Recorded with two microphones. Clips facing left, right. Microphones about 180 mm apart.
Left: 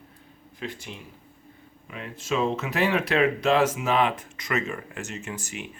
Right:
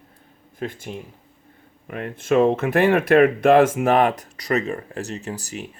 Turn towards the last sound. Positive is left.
turn(degrees=-35)  # may be behind; listen again after turning